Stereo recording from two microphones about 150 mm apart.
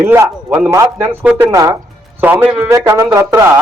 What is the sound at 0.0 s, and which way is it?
A man's voice, 15° right (ahead or behind).